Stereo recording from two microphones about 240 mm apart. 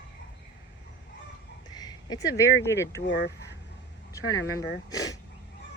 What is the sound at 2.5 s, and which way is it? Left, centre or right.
Speech, left.